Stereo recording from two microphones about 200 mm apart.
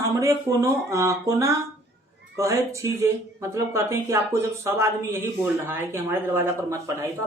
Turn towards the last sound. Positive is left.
turn(degrees=-15)  # may be behind; listen again after turning